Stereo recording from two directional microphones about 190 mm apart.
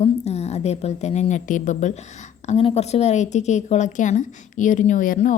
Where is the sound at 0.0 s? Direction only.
35° left (ahead or behind).